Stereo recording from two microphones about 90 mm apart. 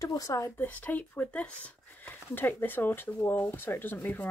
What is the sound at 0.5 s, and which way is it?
Speech, 20° left (ahead or behind).